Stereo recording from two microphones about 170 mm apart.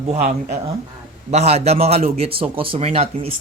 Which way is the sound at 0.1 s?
40° right (ahead or behind).